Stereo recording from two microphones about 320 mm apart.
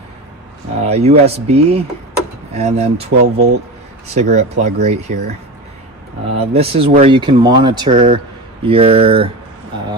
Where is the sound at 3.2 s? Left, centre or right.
Right.